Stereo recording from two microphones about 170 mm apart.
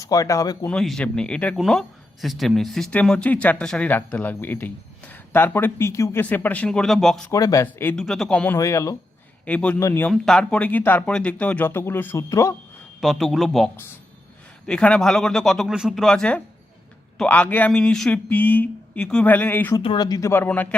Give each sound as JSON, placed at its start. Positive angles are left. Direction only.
{"t": 0.0, "sound": "speech", "side_deg": 20}
{"t": 0.7, "sound": "speech", "side_deg": 5}
{"t": 7.3, "sound": "speech", "side_deg": 20}
{"t": 7.9, "sound": "speech", "side_deg": 0}
{"t": 8.5, "sound": "speech", "side_deg": 20}
{"t": 9.5, "sound": "speech", "side_deg": 10}
{"t": 10.1, "sound": "speech", "side_deg": 5}
{"t": 13.0, "sound": "speech", "side_deg": 0}
{"t": 14.7, "sound": "speech", "side_deg": 5}
{"t": 19.8, "sound": "speech", "side_deg": 25}